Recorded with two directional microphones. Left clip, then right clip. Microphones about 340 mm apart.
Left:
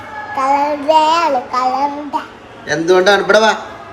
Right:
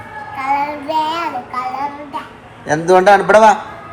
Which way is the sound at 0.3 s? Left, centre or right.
Centre.